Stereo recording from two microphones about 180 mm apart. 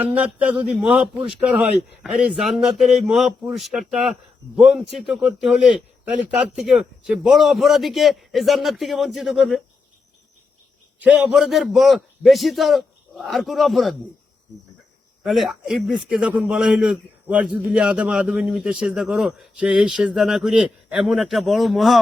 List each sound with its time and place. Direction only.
0.0 s a man's voice: 10° right (ahead or behind)
11.0 s a man's voice: 5° right (ahead or behind)
15.2 s a man's voice: centre (ahead or behind)